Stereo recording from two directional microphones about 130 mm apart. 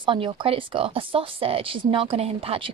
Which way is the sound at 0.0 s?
40° right (ahead or behind).